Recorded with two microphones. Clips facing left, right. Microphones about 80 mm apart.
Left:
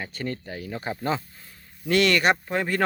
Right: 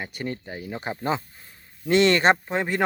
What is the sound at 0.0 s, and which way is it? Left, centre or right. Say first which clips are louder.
Speech: even; centre.